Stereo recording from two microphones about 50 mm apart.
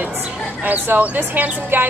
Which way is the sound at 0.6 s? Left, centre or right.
Right.